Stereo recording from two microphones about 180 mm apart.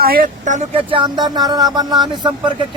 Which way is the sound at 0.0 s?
55° right (ahead or behind).